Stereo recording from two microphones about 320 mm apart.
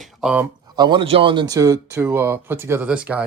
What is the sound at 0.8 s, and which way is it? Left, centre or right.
Speech, centre.